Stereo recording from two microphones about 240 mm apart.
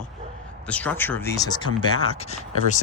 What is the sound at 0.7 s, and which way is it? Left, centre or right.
Speech, centre.